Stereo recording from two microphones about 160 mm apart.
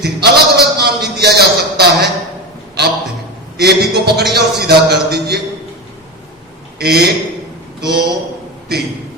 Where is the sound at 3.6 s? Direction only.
90° right.